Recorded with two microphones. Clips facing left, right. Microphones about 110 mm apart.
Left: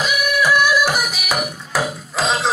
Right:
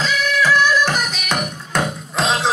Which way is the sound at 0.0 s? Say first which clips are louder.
Even; 15° left (ahead or behind).